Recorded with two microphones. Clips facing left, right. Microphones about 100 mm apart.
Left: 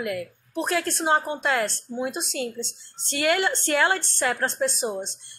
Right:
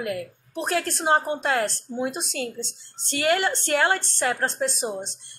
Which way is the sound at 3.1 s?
35° right (ahead or behind).